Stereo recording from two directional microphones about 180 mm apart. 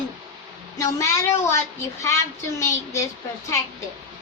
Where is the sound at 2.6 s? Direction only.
15° left (ahead or behind).